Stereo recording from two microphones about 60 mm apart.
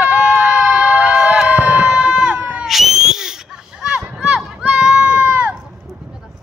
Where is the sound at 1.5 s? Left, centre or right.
Right.